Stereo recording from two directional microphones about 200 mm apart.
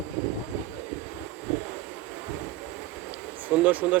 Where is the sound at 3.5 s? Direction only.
10° right (ahead or behind).